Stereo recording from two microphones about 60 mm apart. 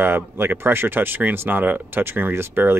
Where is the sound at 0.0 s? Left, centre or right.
Right.